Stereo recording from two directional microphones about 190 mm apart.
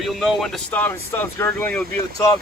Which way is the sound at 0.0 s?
Centre (ahead or behind).